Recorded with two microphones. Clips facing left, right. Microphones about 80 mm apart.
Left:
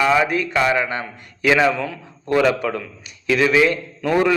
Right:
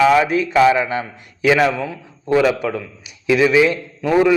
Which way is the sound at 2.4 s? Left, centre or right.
Centre.